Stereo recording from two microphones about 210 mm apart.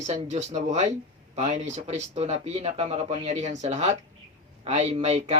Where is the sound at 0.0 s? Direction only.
30° right (ahead or behind).